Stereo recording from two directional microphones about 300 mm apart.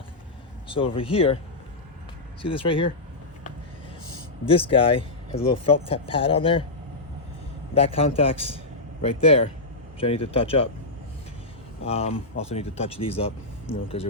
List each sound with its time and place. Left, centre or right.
0.9 s speech: centre
2.4 s speech: centre
4.4 s speech: centre
7.7 s speech: centre
11.8 s speech: centre